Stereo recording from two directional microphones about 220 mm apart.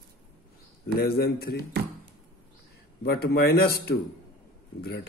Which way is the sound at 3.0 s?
45° left (ahead or behind).